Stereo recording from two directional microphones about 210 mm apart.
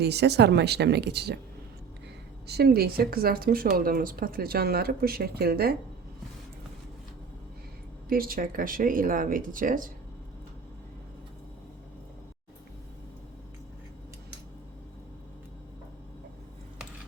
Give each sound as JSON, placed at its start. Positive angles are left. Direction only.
{"t": 0.0, "sound": "speech", "side_deg": -50}
{"t": 2.5, "sound": "speech", "side_deg": -50}
{"t": 8.1, "sound": "speech", "side_deg": -45}